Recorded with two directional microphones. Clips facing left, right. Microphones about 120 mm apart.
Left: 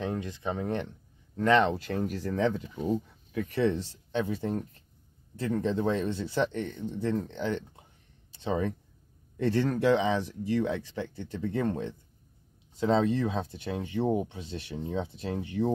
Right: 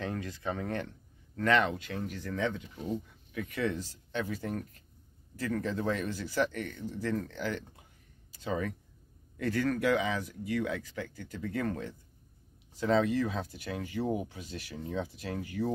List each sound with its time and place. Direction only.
0.0 s speech: 20° left (ahead or behind)
1.8 s speech: 40° left (ahead or behind); by 15.7 s 25° left (ahead or behind)